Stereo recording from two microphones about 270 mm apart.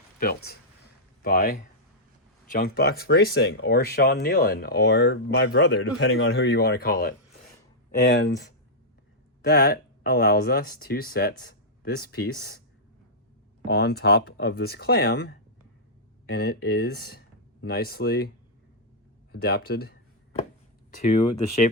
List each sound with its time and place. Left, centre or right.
0.2 s speech: left
13.7 s speech: left
19.3 s a sound: left
20.9 s speech: left